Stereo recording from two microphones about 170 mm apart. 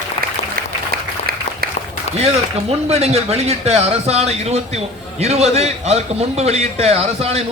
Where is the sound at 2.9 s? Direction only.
40° right (ahead or behind).